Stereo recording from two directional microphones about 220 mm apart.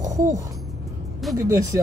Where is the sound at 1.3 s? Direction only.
15° right (ahead or behind).